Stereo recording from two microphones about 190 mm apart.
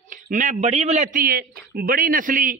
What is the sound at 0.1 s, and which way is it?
A man's voice, 40° right (ahead or behind).